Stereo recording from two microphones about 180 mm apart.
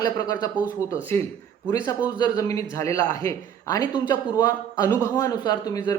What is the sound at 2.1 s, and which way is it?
A man's voice, 20° left (ahead or behind).